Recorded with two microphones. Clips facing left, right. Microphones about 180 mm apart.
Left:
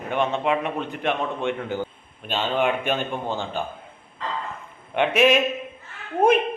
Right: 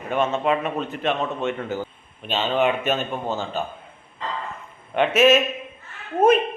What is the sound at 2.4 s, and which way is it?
Speech, 5° right (ahead or behind).